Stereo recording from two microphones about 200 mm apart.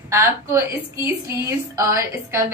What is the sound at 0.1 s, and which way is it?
A woman's voice, 15° right (ahead or behind).